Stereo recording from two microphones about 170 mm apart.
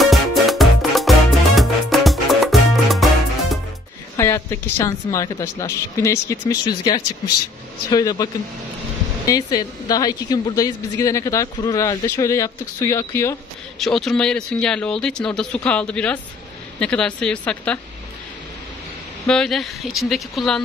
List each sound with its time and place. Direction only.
0.0 s music: centre (ahead or behind)
4.2 s a woman's voice: 15° left (ahead or behind)
13.7 s speech: centre (ahead or behind)
19.2 s speech: 5° left (ahead or behind)